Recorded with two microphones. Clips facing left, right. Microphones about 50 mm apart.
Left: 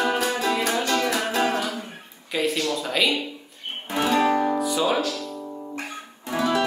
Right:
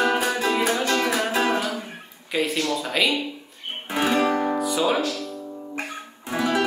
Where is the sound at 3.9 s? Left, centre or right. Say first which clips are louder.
Left 1 dB; centre.